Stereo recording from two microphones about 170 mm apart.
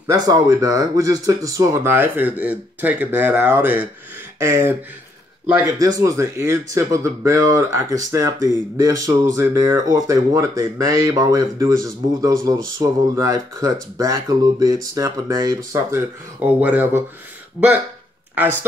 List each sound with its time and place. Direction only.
0.0 s speech: 20° right (ahead or behind)
5.8 s speech: 20° right (ahead or behind)
18.3 s speech: 10° right (ahead or behind)